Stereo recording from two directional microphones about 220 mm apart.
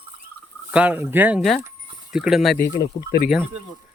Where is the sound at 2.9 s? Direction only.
30° left (ahead or behind).